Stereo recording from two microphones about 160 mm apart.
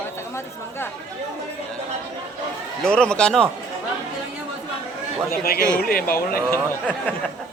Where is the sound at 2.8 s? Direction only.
5° left (ahead or behind).